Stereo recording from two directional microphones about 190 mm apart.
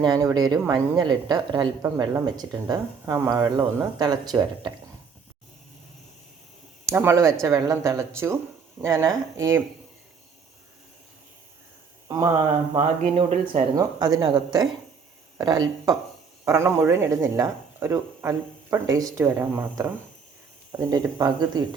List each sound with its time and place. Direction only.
0.0 s a woman's voice: 20° right (ahead or behind)
6.8 s speech: 15° right (ahead or behind)
12.0 s speech: 15° right (ahead or behind)
12.7 s speech: 30° right (ahead or behind)
13.7 s a woman's voice: 20° right (ahead or behind)